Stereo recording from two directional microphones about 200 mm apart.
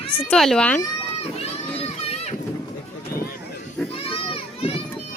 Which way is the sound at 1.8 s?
30° left (ahead or behind).